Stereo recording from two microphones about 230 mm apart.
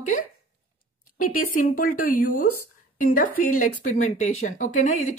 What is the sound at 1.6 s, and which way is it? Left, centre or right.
Speech, left.